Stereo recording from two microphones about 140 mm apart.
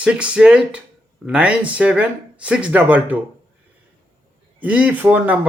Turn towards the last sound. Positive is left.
turn(degrees=-10)  # may be behind; listen again after turning